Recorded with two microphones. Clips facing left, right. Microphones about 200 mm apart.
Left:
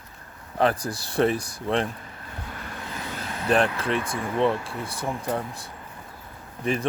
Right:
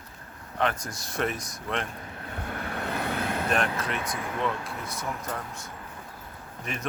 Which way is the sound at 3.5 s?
30° left (ahead or behind).